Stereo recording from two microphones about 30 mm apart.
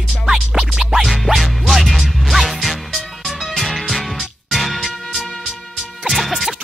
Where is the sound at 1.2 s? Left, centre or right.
Centre.